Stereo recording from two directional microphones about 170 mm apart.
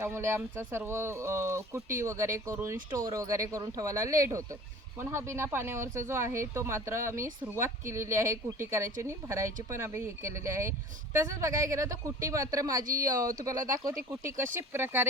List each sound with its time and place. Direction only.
0.0 s speech: 15° right (ahead or behind)